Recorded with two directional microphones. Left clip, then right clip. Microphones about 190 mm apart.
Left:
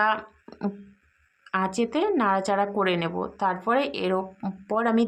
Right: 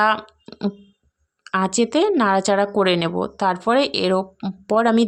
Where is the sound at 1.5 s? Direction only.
35° right (ahead or behind).